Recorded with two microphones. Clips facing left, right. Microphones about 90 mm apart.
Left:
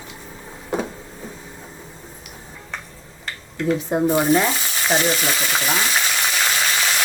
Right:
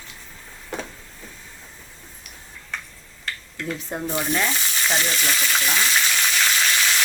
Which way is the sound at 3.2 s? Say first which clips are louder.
Left 8 dB; 25° left (ahead or behind).